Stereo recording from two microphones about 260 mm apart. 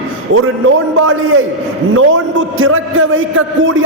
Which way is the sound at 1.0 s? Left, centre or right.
Right.